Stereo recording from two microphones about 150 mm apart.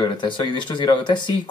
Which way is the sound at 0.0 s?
30° left (ahead or behind).